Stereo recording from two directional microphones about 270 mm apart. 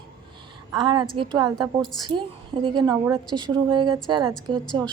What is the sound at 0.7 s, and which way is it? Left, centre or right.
A woman's voice, centre.